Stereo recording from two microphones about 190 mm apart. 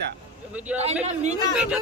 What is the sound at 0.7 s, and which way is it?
Speech, 35° right (ahead or behind).